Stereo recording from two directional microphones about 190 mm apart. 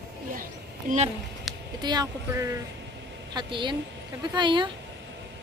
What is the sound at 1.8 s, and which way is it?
Speech, 20° right (ahead or behind).